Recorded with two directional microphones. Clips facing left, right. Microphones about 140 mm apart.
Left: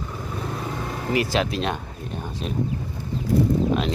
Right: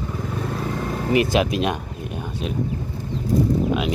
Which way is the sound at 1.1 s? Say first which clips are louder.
Right 4 dB; 20° right (ahead or behind).